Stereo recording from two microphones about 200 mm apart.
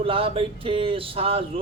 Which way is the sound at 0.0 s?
25° right (ahead or behind).